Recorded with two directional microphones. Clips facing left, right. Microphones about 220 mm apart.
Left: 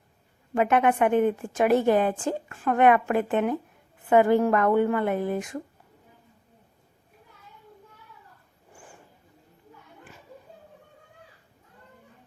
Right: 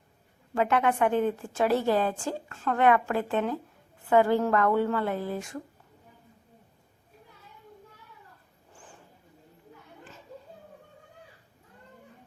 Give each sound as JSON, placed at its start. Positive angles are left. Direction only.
{"t": 0.5, "sound": "a woman's voice", "side_deg": 20}
{"t": 8.7, "sound": "wild animals", "side_deg": 10}